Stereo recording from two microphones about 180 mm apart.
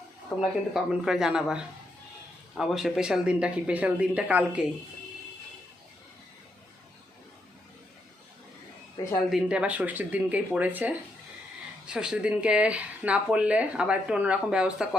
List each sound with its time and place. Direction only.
0.3 s speech: 10° left (ahead or behind)
0.7 s speech: 5° right (ahead or behind)
9.0 s a woman's voice: 20° left (ahead or behind)
9.3 s speech: 5° right (ahead or behind)